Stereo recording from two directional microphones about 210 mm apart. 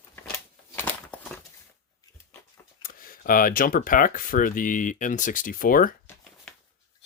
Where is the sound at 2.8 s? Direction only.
40° left (ahead or behind).